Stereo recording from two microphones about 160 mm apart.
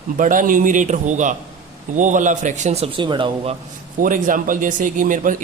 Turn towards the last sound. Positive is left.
turn(degrees=-55)  # may be behind; listen again after turning